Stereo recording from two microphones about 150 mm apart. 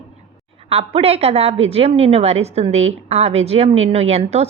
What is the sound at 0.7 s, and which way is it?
A woman's voice, 40° right (ahead or behind).